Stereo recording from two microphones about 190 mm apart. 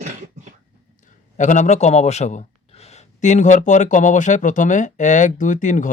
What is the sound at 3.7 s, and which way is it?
Speech, 40° left (ahead or behind).